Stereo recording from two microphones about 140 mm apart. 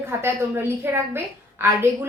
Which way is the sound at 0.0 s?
15° right (ahead or behind).